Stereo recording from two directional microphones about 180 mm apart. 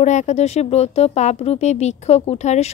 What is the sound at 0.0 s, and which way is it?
Speech, 40° left (ahead or behind).